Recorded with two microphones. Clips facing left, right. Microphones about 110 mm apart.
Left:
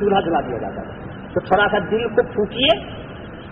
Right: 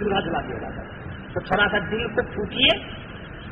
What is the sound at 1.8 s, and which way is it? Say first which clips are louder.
A man's voice: left 7 dB; 35° left (ahead or behind).